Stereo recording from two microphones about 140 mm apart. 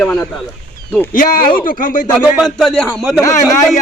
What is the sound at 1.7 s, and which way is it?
Speech, 75° left (ahead or behind).